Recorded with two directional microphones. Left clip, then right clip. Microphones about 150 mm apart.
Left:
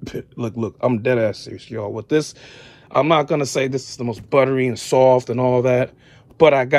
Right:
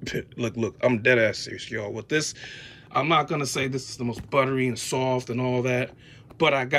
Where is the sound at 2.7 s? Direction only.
45° left (ahead or behind).